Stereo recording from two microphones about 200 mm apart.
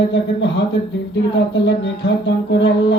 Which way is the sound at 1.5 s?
60° left (ahead or behind).